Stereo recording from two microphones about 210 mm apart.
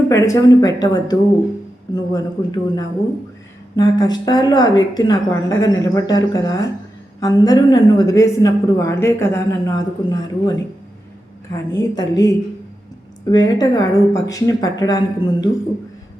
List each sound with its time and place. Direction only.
0.1 s a woman's voice: 15° left (ahead or behind)